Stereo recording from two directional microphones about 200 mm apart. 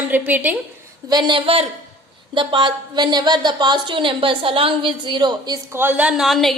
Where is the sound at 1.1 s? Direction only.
25° right (ahead or behind).